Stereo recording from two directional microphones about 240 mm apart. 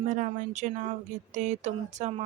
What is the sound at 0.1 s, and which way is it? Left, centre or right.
Speech, right.